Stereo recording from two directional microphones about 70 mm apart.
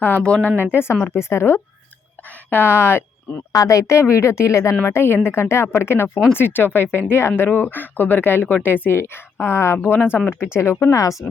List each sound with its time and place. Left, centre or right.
0.2 s speech: centre
0.6 s speech: left
3.5 s speech: left
10.9 s speech: left